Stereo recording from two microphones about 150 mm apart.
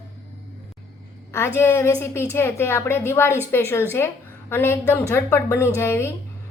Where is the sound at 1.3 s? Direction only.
15° left (ahead or behind).